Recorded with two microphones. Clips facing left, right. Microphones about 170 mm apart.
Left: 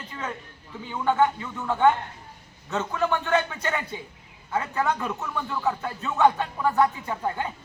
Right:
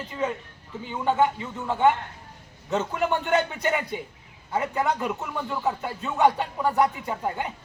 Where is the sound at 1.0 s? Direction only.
25° right (ahead or behind).